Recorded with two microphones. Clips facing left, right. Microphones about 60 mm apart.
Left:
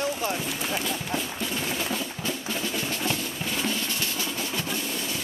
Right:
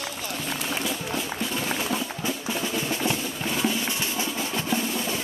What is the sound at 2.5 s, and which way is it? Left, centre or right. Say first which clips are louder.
Drum: right 3 dB; centre.